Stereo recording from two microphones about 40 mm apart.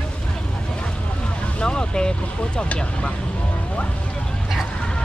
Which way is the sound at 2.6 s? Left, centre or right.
Left.